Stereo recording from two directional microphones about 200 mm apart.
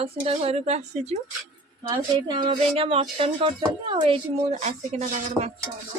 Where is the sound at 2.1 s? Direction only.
20° right (ahead or behind).